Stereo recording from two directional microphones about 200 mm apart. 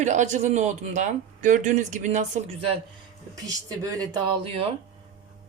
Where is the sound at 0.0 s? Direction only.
35° right (ahead or behind).